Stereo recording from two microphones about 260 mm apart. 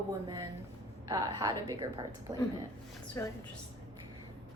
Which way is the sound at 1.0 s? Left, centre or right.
Centre.